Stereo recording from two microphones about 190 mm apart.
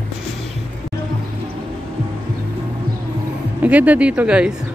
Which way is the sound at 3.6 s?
10° right (ahead or behind).